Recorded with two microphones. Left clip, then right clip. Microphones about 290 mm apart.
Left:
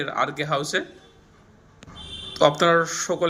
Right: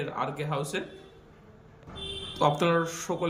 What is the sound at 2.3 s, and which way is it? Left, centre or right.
Speech, centre.